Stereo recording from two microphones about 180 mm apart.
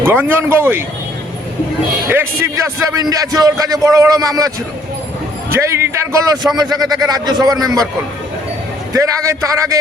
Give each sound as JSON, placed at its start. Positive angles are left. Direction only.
{"t": 0.0, "sound": "speech", "side_deg": -10}
{"t": 2.0, "sound": "a man's voice", "side_deg": -15}
{"t": 8.9, "sound": "speech", "side_deg": -15}